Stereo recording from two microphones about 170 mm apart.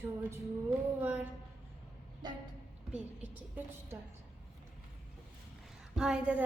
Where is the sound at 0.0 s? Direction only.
15° right (ahead or behind).